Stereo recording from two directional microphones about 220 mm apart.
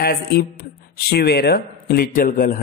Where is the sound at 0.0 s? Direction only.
45° left (ahead or behind).